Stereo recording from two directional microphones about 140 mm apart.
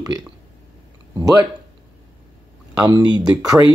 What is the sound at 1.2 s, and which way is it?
Speech, 25° right (ahead or behind).